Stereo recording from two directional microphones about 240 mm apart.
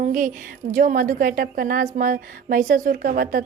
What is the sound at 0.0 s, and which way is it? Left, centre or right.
A woman's voice, right.